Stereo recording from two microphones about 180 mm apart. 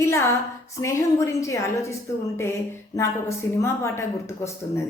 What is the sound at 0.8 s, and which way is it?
A woman's voice, 15° left (ahead or behind).